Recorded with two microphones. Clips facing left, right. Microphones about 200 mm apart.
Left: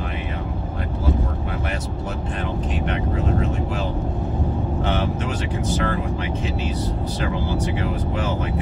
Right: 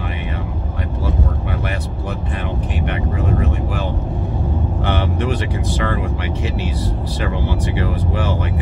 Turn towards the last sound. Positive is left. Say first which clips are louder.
# right 2 dB
turn(degrees=-70)  # may be behind; listen again after turning